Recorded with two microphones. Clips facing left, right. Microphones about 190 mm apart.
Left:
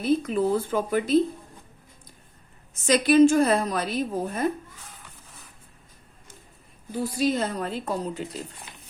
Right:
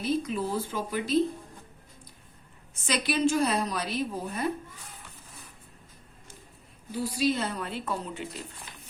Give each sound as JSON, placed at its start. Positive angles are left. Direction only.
{"t": 0.0, "sound": "a woman's voice", "side_deg": 55}
{"t": 2.8, "sound": "a woman's voice", "side_deg": 45}
{"t": 6.9, "sound": "speech", "side_deg": 50}